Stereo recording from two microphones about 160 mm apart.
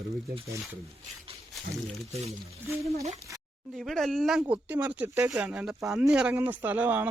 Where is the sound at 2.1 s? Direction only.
40° right (ahead or behind).